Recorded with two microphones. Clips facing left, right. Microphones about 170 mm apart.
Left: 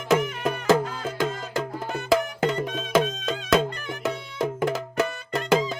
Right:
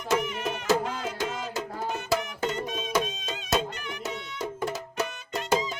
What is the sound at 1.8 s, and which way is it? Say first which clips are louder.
Music: left 5 dB; 60° left (ahead or behind).